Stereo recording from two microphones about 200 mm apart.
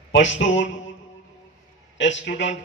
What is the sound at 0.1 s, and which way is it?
Speech, 65° left (ahead or behind).